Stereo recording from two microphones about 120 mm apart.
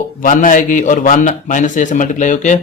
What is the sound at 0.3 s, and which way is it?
Speech, 90° left.